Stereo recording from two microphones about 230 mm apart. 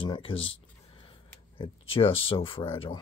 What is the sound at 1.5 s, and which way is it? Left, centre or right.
Speech, left.